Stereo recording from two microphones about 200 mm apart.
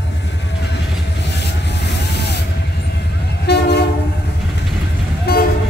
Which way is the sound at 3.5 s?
55° left (ahead or behind).